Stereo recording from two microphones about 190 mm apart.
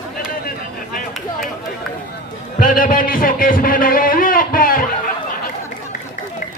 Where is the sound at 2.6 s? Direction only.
45° left (ahead or behind).